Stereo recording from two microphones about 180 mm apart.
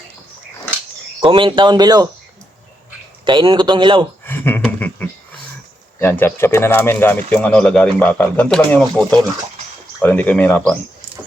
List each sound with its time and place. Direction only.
1.2 s speech: 30° right (ahead or behind)
3.2 s speech: 25° right (ahead or behind)
4.3 s a sound: 10° left (ahead or behind)
6.0 s speech: 10° left (ahead or behind)